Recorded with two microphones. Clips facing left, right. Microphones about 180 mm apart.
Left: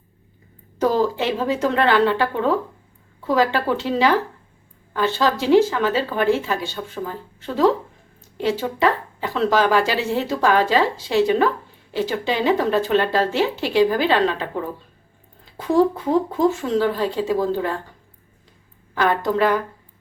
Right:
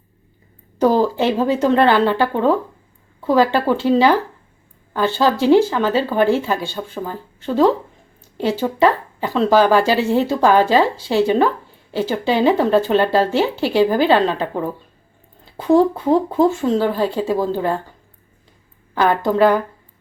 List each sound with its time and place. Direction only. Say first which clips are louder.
0.8 s speech: right 4 dB; 30° right (ahead or behind)
16.7 s speech: right 2 dB; 30° right (ahead or behind)
18.9 s speech: right 4 dB; 35° right (ahead or behind)